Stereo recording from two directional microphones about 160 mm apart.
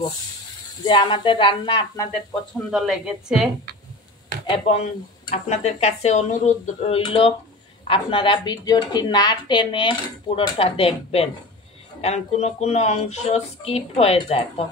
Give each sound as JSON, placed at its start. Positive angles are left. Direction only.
{"t": 0.8, "sound": "speech", "side_deg": 30}
{"t": 2.5, "sound": "a woman's voice", "side_deg": 0}
{"t": 4.5, "sound": "a woman's voice", "side_deg": 40}
{"t": 7.0, "sound": "a woman's voice", "side_deg": 35}